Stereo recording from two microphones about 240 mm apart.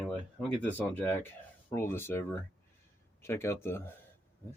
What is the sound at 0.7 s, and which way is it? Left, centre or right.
Speech, centre.